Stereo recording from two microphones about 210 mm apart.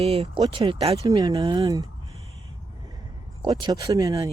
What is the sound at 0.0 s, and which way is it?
Speech, 30° right (ahead or behind).